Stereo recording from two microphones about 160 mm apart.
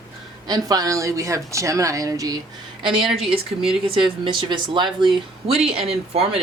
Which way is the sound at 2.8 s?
30° right (ahead or behind).